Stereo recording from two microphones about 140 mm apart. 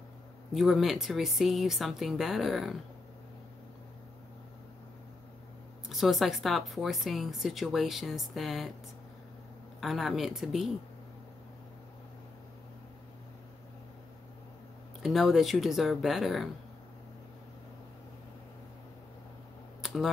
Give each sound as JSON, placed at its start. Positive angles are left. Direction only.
{"t": 0.6, "sound": "a woman's voice", "side_deg": 0}
{"t": 5.9, "sound": "a woman's voice", "side_deg": 0}
{"t": 9.8, "sound": "a woman's voice", "side_deg": 0}
{"t": 15.0, "sound": "a woman's voice", "side_deg": 0}
{"t": 19.8, "sound": "a sound", "side_deg": 0}